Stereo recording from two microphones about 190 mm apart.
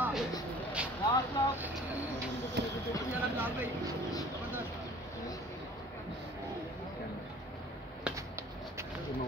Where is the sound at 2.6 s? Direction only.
65° right (ahead or behind).